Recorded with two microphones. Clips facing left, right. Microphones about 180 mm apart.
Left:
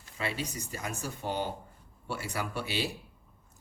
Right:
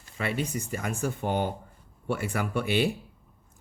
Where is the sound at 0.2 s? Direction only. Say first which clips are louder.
Right 5 dB; 55° right (ahead or behind).